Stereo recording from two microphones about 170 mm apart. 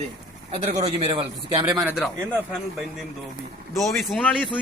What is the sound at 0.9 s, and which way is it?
Speech, 35° right (ahead or behind).